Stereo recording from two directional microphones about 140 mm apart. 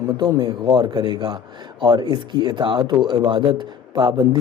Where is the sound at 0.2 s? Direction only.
30° right (ahead or behind).